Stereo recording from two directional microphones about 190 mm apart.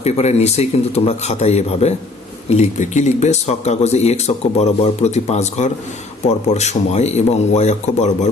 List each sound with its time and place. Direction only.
0.0 s speech: 35° left (ahead or behind)